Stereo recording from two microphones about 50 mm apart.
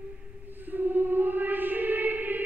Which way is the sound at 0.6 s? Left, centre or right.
Right.